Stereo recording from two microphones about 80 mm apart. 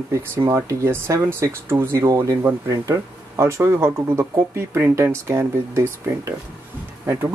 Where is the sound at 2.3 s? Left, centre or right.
Right.